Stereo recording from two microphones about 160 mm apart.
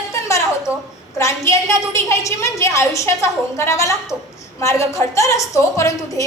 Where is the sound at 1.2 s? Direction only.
20° left (ahead or behind).